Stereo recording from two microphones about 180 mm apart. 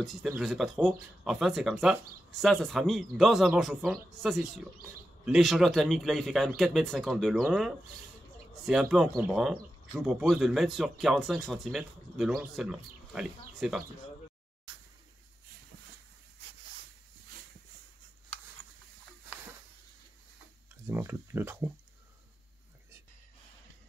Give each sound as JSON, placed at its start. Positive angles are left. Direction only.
{"t": 0.0, "sound": "speech", "side_deg": 0}
{"t": 8.9, "sound": "speech", "side_deg": 0}
{"t": 20.8, "sound": "speech", "side_deg": -15}